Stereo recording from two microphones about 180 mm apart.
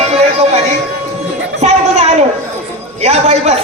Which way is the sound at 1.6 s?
35° right (ahead or behind).